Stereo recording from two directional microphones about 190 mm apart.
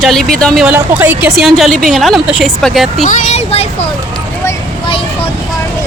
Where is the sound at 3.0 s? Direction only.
40° left (ahead or behind).